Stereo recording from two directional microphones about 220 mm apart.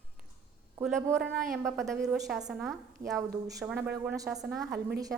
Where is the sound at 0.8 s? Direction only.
10° right (ahead or behind).